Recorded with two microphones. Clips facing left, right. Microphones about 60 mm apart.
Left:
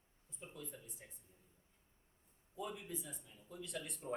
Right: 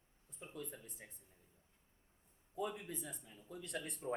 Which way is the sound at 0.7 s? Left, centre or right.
Right.